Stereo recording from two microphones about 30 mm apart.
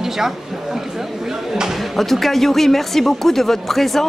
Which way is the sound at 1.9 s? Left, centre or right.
Centre.